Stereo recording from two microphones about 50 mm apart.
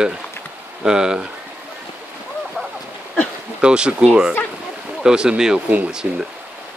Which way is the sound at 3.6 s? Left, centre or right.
Centre.